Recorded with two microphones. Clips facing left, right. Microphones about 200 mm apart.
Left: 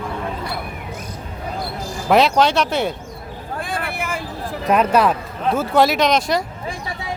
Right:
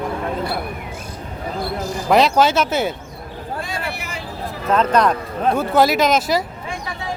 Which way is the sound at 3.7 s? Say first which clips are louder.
Left 3 dB; 55° left (ahead or behind).